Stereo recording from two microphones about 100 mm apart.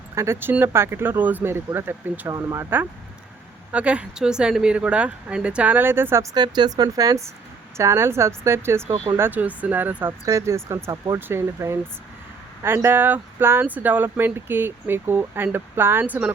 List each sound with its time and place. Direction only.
0.2 s speech: 25° right (ahead or behind)
2.2 s speech: 30° right (ahead or behind)
3.7 s speech: 10° right (ahead or behind)
6.3 s speech: 45° right (ahead or behind); by 10.2 s 20° right (ahead or behind)
10.2 s speech: 30° right (ahead or behind)
10.9 s speech: 40° right (ahead or behind)
11.2 s speech: 25° right (ahead or behind)